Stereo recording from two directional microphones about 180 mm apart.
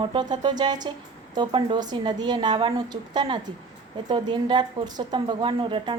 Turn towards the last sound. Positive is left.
turn(degrees=-25)  # may be behind; listen again after turning